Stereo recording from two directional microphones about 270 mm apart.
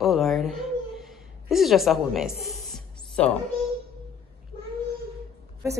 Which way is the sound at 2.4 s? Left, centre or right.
Centre.